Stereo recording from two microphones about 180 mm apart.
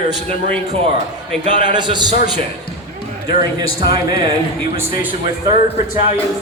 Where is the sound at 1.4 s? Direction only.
40° right (ahead or behind).